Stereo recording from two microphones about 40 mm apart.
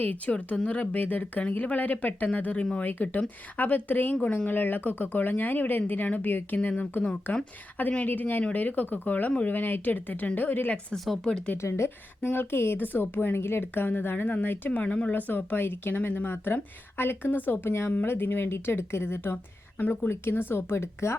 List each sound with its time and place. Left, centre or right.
0.0 s speech: left
9.5 s a woman's voice: left
10.9 s speech: centre
11.2 s speech: centre
11.5 s a woman's voice: left
12.8 s a woman's voice: left
14.7 s speech: left
15.1 s a woman's voice: left
17.3 s speech: left
17.7 s speech: left
18.0 s a woman's voice: left
18.3 s speech: left
20.1 s speech: left